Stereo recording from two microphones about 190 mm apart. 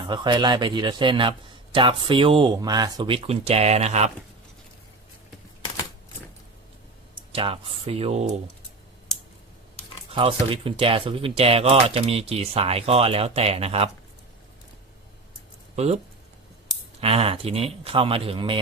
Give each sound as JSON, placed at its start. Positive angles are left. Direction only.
{"t": 0.0, "sound": "a man's voice", "side_deg": -25}
{"t": 7.3, "sound": "a man's voice", "side_deg": -30}
{"t": 10.1, "sound": "a sound", "side_deg": -30}
{"t": 10.5, "sound": "speech", "side_deg": -30}
{"t": 15.7, "sound": "speech", "side_deg": -35}
{"t": 17.0, "sound": "speech", "side_deg": -30}